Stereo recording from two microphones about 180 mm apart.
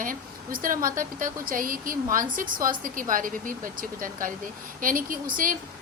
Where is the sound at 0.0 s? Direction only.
50° right (ahead or behind).